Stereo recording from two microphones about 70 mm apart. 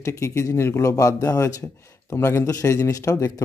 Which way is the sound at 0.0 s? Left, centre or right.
Left.